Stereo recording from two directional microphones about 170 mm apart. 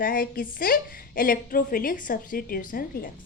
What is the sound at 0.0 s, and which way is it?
A woman's voice, 55° left (ahead or behind).